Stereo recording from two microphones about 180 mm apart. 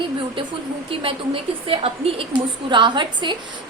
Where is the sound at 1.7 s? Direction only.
30° right (ahead or behind).